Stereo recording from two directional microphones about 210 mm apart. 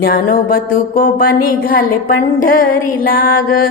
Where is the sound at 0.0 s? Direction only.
45° left (ahead or behind).